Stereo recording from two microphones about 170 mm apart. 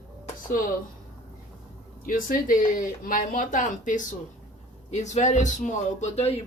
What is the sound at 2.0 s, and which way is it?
A woman's voice, 55° left (ahead or behind).